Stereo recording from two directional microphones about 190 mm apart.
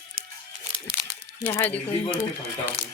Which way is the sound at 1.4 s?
20° left (ahead or behind).